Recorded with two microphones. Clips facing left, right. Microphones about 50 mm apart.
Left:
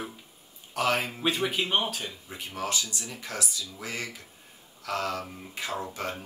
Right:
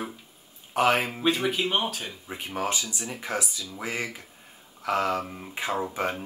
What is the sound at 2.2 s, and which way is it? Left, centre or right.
Speech, right.